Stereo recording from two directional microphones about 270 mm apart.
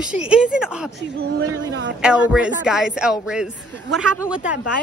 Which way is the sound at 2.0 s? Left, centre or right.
Centre.